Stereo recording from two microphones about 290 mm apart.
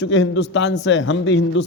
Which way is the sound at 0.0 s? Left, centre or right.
Left.